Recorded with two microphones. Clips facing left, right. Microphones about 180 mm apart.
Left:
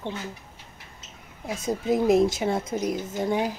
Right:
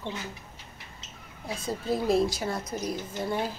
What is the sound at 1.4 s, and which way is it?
A woman's voice, 20° left (ahead or behind).